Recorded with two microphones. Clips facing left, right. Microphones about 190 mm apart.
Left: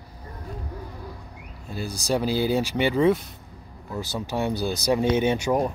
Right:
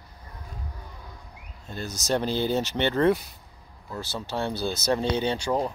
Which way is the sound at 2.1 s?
5° left (ahead or behind).